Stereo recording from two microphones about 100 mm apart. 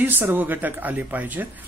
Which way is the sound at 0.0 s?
20° right (ahead or behind).